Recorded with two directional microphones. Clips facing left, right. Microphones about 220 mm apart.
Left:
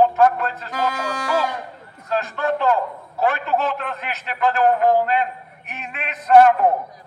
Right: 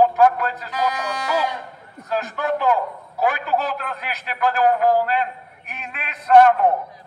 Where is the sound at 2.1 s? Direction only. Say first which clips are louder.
Left 1 dB; 10° right (ahead or behind).